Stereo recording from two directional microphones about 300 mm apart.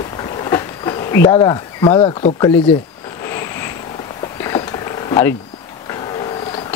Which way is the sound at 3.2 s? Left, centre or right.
Centre.